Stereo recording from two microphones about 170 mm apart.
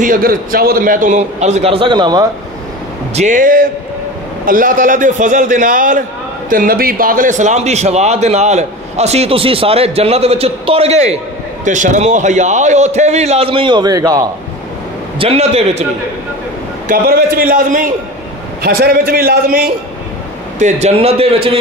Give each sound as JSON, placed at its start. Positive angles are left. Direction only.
{"t": 0.0, "sound": "a man's voice", "side_deg": -55}
{"t": 3.2, "sound": "a man's voice", "side_deg": -50}
{"t": 15.1, "sound": "a man's voice", "side_deg": -35}
{"t": 16.8, "sound": "a man's voice", "side_deg": -60}
{"t": 18.6, "sound": "a man's voice", "side_deg": -65}
{"t": 20.5, "sound": "a man's voice", "side_deg": -40}